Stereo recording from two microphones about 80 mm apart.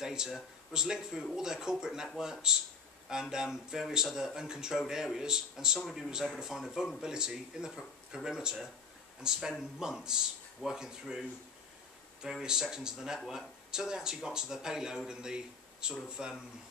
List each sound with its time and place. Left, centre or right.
0.0 s speech: centre